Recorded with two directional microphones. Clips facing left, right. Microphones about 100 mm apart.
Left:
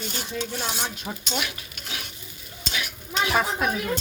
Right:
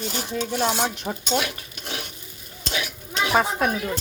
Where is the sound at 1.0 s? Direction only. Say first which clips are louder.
Right 6 dB; 40° right (ahead or behind).